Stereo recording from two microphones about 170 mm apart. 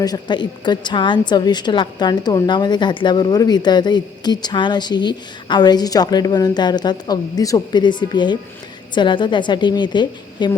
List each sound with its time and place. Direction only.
0.0 s a woman's voice: 25° left (ahead or behind)